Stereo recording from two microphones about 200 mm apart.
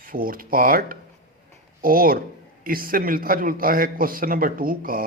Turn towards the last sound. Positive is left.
turn(degrees=-45)  # may be behind; listen again after turning